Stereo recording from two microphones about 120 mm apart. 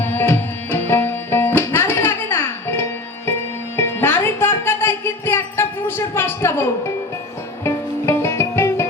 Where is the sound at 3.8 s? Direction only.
20° left (ahead or behind).